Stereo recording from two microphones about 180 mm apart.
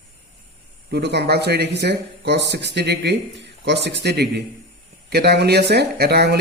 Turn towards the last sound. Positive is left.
turn(degrees=-65)  # may be behind; listen again after turning